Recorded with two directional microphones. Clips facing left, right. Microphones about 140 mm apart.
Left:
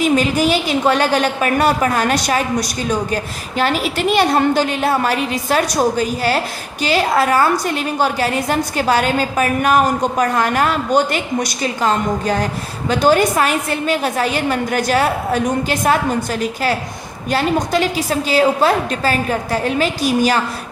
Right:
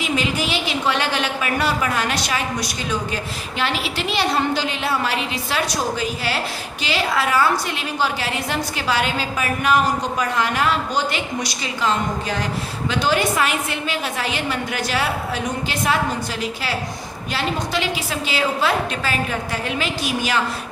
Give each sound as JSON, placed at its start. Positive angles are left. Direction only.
{"t": 0.0, "sound": "a woman's voice", "side_deg": 45}
{"t": 17.3, "sound": "a woman's voice", "side_deg": 45}